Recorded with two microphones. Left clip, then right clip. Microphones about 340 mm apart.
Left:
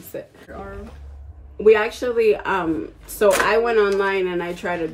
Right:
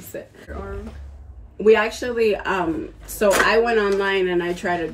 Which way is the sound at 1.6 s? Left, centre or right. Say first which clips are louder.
Left 1 dB; centre.